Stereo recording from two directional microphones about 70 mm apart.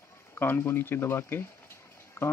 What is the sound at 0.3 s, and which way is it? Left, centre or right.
Speech, left.